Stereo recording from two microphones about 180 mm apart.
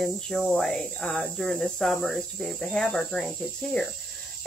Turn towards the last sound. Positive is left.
turn(degrees=0)  # may be behind; listen again after turning